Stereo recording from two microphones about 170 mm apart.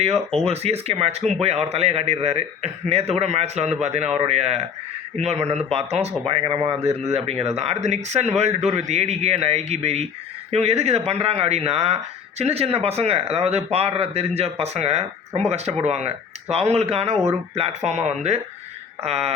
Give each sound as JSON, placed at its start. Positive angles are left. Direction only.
{"t": 0.4, "sound": "a man's voice", "side_deg": -40}